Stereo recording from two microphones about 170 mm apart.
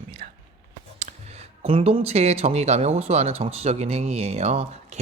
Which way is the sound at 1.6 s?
35° right (ahead or behind).